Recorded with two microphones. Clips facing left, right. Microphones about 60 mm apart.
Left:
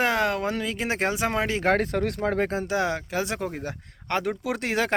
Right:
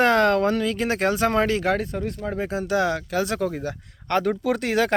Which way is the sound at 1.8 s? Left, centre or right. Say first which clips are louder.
Left 3 dB; left.